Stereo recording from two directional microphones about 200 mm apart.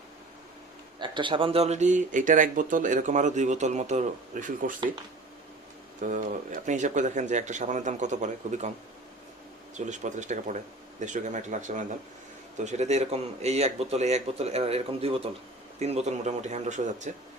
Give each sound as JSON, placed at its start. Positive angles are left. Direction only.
{"t": 0.9, "sound": "speech", "side_deg": -25}
{"t": 6.0, "sound": "speech", "side_deg": -40}
{"t": 9.7, "sound": "speech", "side_deg": -35}